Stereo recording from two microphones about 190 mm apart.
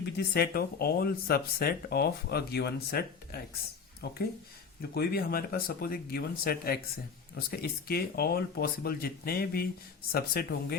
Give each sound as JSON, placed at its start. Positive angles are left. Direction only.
{"t": 0.0, "sound": "speech", "side_deg": 55}